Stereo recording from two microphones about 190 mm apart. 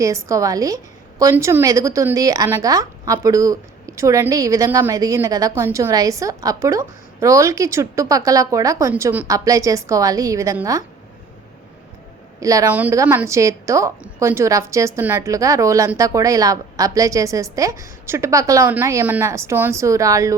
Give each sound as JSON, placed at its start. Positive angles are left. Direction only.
{"t": 0.0, "sound": "speech", "side_deg": -15}
{"t": 12.4, "sound": "speech", "side_deg": -15}